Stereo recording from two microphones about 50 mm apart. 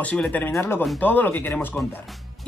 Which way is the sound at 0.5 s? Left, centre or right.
Left.